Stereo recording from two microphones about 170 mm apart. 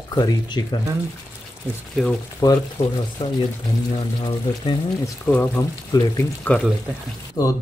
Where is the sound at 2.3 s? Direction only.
20° left (ahead or behind).